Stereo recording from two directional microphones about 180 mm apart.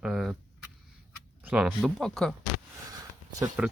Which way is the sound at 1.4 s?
10° right (ahead or behind).